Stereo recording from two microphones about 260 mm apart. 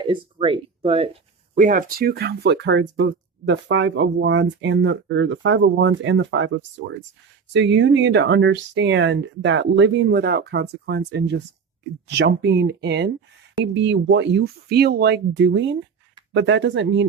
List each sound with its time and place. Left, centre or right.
0.0 s speech: centre; by 17.1 s right